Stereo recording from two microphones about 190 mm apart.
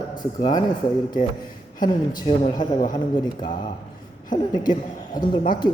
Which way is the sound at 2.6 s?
45° left (ahead or behind).